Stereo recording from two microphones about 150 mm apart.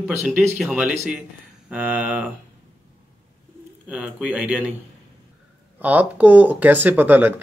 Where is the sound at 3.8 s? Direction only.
10° right (ahead or behind).